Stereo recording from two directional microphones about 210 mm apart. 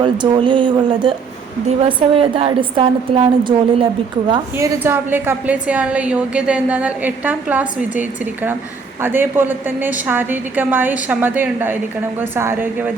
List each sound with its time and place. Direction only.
0.0 s a woman's voice: 25° right (ahead or behind)